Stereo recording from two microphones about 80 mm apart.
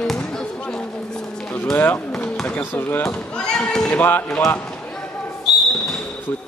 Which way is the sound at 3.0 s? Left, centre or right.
Centre.